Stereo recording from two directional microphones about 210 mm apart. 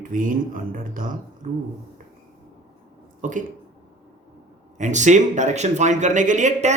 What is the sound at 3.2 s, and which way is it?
Speech, 40° right (ahead or behind).